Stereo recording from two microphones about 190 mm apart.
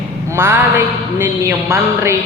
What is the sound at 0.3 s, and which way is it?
A man's voice, 10° right (ahead or behind).